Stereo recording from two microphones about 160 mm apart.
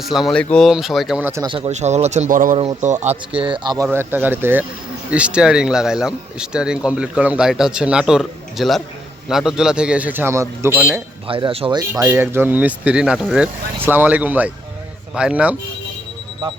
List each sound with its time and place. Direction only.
0.0 s speech: centre (ahead or behind)
1.5 s speech: 35° right (ahead or behind)
3.9 s speech: 15° right (ahead or behind)
11.3 s speech: 35° right (ahead or behind); by 15.5 s 5° right (ahead or behind)